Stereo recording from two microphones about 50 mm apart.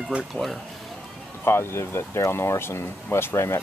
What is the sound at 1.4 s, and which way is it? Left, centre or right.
Speech, left.